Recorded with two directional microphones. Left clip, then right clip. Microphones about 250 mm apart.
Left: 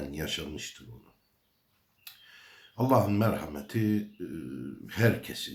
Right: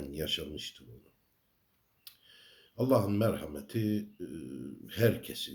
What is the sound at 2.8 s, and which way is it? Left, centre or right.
Speech, centre.